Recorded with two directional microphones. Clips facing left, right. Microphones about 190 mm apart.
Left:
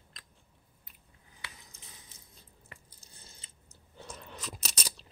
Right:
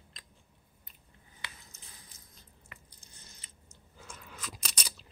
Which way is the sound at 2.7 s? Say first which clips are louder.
Left 1 dB; 30° left (ahead or behind).